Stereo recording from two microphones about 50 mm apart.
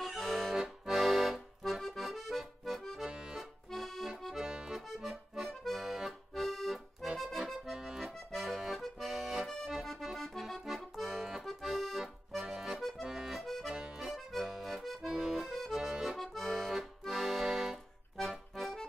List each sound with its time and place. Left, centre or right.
0.0 s accordion: centre
3.0 s accordion: centre
3.3 s accordion: centre
4.4 s accordion: centre
4.7 s accordion: centre
9.5 s accordion: centre
15.1 s accordion: centre
15.4 s accordion: centre
15.8 s accordion: centre
16.2 s accordion: centre